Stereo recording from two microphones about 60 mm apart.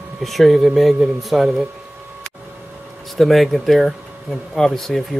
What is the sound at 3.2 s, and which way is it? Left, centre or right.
Speech, centre.